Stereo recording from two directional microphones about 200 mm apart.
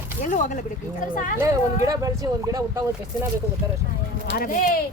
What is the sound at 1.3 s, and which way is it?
Speech, 15° right (ahead or behind).